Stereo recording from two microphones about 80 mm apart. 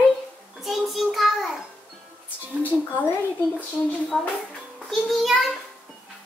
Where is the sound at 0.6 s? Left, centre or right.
Centre.